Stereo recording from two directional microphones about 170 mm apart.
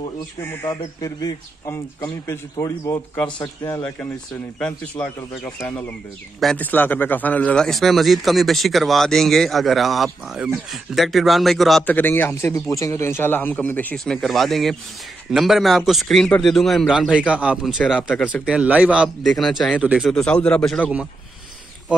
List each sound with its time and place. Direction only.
0.4 s a man's voice: 15° left (ahead or behind)
4.6 s a man's voice: 5° left (ahead or behind)
18.4 s a man's voice: 5° right (ahead or behind)